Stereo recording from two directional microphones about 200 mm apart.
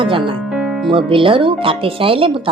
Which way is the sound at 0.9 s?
25° right (ahead or behind).